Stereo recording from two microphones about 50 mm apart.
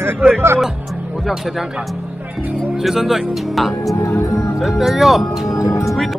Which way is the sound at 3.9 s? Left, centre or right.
Left.